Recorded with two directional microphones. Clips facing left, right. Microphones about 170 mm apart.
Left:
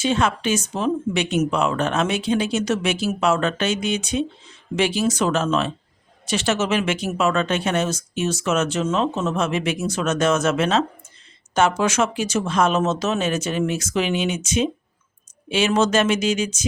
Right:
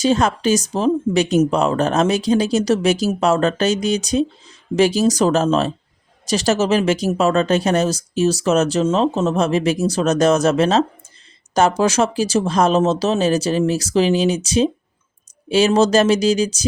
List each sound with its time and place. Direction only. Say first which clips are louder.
0.0 s speech: right 4 dB; 40° right (ahead or behind)